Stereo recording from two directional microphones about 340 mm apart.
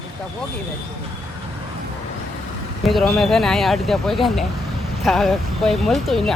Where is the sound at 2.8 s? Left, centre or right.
Centre.